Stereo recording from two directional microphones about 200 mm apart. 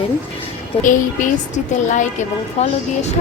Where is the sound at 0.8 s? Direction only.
40° left (ahead or behind).